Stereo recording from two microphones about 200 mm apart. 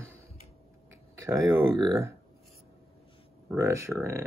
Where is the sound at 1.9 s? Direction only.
10° right (ahead or behind).